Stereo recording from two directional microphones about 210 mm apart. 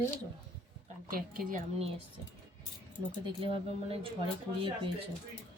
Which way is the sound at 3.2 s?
25° right (ahead or behind).